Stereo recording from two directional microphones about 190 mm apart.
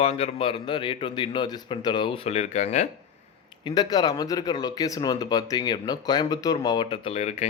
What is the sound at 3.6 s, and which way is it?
Speech, 20° left (ahead or behind).